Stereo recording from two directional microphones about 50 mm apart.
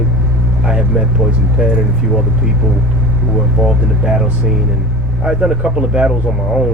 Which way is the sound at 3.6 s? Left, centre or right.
Centre.